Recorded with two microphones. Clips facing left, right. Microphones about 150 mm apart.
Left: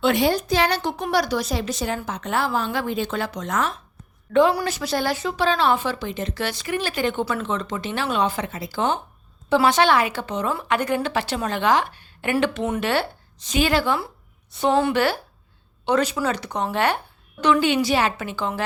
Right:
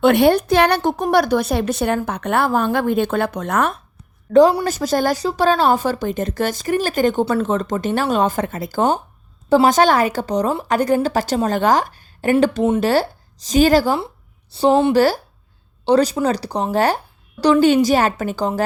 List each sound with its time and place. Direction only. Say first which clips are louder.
0.0 s a woman's voice: right 7 dB; 60° right (ahead or behind)
4.3 s a woman's voice: right 6 dB; 40° right (ahead or behind)
14.9 s a woman's voice: right 6 dB; 40° right (ahead or behind)